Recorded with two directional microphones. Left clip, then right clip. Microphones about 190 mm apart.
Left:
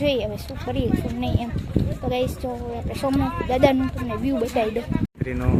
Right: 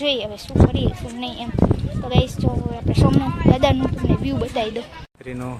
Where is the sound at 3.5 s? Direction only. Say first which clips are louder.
Right 1 dB; centre (ahead or behind).